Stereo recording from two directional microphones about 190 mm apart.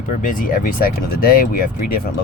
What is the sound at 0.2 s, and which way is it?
Speech, 45° left (ahead or behind).